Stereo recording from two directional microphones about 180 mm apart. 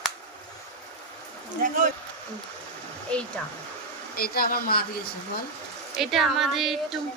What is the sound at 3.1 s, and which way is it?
Speech, 5° left (ahead or behind).